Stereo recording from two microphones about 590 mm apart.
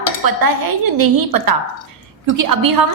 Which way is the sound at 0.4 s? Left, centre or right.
Right.